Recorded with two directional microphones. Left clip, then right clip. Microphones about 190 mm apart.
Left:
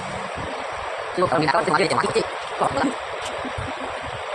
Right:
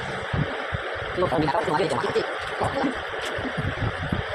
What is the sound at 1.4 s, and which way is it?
Speech, 25° left (ahead or behind).